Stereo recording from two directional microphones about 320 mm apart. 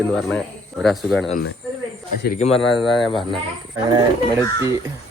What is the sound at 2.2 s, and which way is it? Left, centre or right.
Speech, centre.